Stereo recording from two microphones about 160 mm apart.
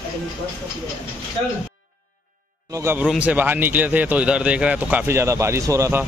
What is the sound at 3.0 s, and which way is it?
Speech, 10° right (ahead or behind).